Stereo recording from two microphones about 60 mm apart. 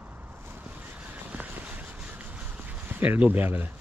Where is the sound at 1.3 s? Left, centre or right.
Right.